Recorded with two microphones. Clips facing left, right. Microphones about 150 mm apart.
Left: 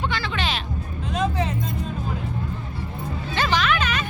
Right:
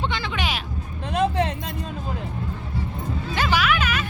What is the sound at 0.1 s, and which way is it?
Music, 15° right (ahead or behind).